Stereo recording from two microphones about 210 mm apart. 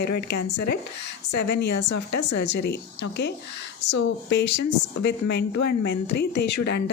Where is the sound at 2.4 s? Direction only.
55° left (ahead or behind).